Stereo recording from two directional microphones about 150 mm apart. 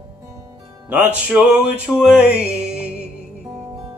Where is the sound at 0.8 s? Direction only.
10° right (ahead or behind).